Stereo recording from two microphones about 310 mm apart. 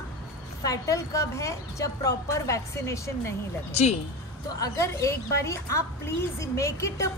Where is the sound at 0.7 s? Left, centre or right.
Centre.